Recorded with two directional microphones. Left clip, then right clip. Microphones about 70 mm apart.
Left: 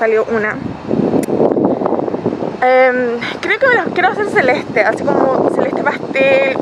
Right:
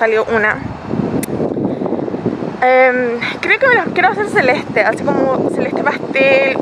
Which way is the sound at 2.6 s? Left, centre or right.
Centre.